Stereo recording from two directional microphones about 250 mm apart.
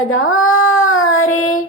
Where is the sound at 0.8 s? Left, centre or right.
Left.